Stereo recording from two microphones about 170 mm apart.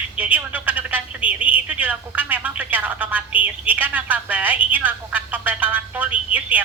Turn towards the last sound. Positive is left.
turn(degrees=-10)  # may be behind; listen again after turning